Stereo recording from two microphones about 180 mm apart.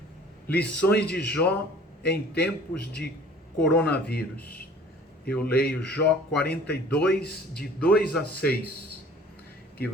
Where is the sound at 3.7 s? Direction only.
10° left (ahead or behind).